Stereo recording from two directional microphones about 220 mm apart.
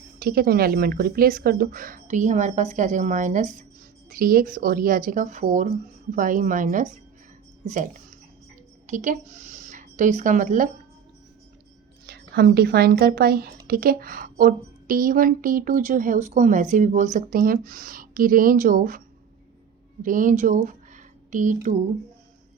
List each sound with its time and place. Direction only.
0.2 s a woman's voice: 45° right (ahead or behind)
12.0 s a woman's voice: 45° right (ahead or behind)